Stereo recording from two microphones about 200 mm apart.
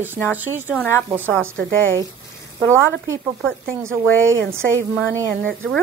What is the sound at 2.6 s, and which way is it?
Speech, 15° right (ahead or behind).